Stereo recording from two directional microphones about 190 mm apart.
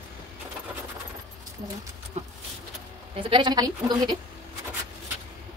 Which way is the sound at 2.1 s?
35° right (ahead or behind).